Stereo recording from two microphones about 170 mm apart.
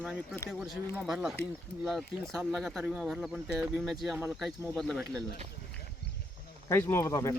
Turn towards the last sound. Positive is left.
turn(degrees=15)  # may be behind; listen again after turning